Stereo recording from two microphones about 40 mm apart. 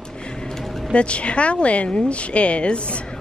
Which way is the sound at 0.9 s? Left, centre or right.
Left.